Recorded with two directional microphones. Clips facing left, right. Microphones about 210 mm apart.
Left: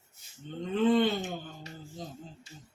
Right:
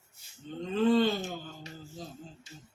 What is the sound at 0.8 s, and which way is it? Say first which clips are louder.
Speech: even; 20° left (ahead or behind).